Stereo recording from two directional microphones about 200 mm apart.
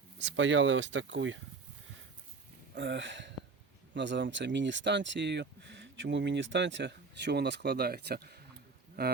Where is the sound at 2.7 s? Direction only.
60° right (ahead or behind).